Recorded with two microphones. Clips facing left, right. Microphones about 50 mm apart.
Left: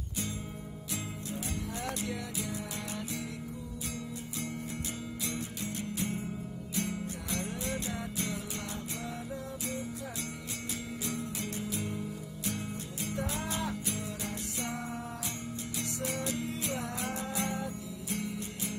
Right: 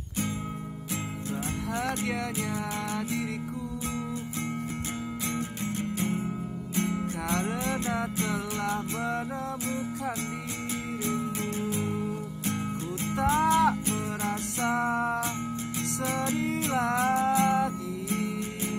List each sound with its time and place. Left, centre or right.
5.3 s music: right
11.1 s music: right
13.3 s music: right
14.8 s music: right
16.1 s music: right
16.7 s music: right
17.0 s music: right